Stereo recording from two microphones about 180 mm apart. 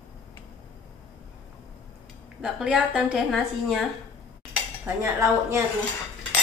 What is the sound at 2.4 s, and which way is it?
A woman's voice, 5° right (ahead or behind).